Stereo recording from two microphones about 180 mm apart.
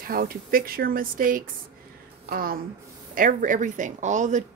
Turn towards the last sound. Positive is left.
turn(degrees=-45)  # may be behind; listen again after turning